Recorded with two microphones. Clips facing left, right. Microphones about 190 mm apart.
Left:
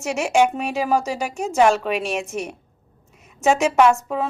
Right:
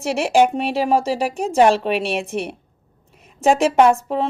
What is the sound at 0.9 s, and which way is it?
Speech, 30° right (ahead or behind).